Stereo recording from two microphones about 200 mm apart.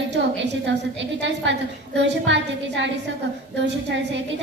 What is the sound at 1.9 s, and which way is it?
A woman's voice, 65° right (ahead or behind).